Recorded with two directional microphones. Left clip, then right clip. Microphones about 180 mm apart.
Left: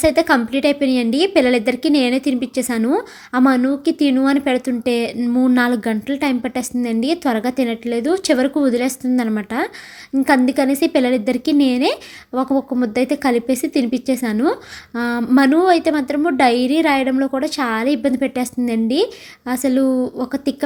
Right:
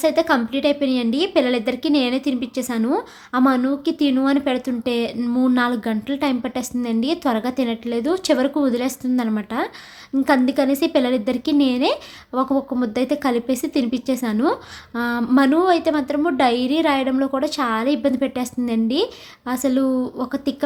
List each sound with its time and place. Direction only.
0.0 s a woman's voice: 20° left (ahead or behind)